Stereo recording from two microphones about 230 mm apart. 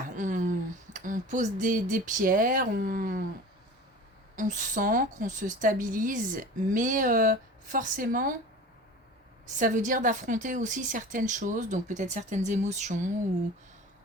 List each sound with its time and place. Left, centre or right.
0.2 s a sound: right
0.9 s speech: right
4.4 s a woman's voice: right
9.6 s a woman's voice: right